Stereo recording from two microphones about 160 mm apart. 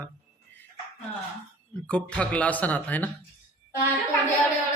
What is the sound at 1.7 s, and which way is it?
Speech, 5° left (ahead or behind).